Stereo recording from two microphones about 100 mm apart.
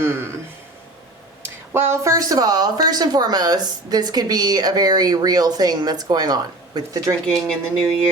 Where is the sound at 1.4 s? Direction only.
25° right (ahead or behind).